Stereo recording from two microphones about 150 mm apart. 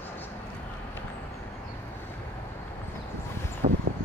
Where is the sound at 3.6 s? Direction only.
45° right (ahead or behind).